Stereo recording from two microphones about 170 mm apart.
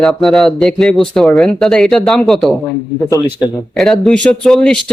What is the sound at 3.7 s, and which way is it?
Speech, 5° left (ahead or behind).